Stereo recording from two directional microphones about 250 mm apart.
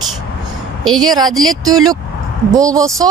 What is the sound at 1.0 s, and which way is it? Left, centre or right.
Speech, centre.